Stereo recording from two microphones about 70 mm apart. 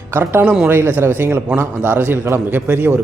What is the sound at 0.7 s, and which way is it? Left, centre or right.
A man's voice, right.